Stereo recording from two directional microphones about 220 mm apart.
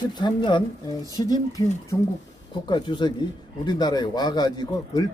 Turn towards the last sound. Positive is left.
turn(degrees=20)  # may be behind; listen again after turning